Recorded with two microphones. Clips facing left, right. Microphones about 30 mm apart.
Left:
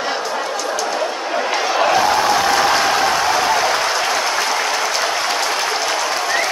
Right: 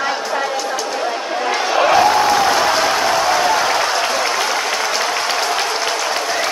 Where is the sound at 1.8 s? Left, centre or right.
Centre.